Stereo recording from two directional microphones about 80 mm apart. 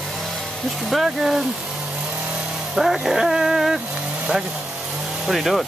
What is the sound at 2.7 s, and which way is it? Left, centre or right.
Dog, centre.